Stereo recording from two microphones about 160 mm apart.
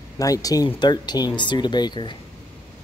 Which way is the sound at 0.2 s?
20° left (ahead or behind).